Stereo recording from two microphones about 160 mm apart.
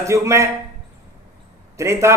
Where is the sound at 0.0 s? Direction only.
20° right (ahead or behind).